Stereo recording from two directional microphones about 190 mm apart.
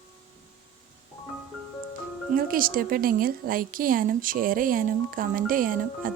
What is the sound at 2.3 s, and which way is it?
A woman's voice, 50° right (ahead or behind).